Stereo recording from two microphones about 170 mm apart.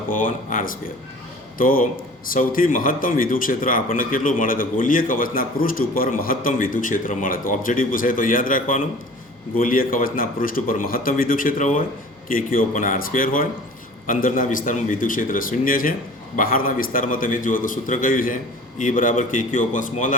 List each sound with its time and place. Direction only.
0.1 s a man's voice: 50° left (ahead or behind)